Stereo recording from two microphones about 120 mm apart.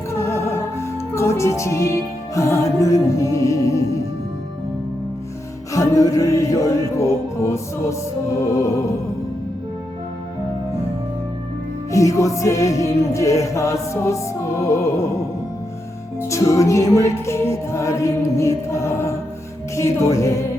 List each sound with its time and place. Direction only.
0.1 s music: 20° left (ahead or behind)
5.7 s music: 30° left (ahead or behind)
11.9 s music: 25° left (ahead or behind)
16.3 s music: 25° left (ahead or behind)